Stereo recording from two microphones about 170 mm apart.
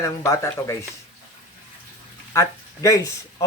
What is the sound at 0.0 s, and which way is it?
Speech, 15° left (ahead or behind).